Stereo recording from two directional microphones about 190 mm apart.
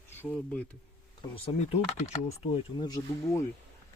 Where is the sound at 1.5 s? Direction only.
35° left (ahead or behind).